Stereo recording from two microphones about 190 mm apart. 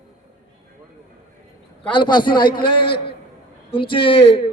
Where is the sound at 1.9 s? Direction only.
25° left (ahead or behind).